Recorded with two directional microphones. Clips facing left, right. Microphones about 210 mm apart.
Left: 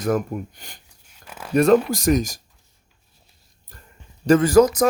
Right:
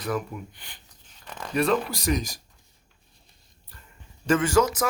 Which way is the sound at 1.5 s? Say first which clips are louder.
Left 8 dB; 45° left (ahead or behind).